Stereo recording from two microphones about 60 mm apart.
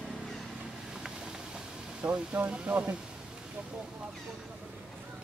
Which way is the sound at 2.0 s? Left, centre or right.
Right.